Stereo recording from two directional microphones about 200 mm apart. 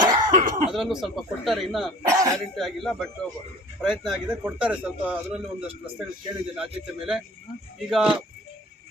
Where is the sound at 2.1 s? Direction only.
15° right (ahead or behind).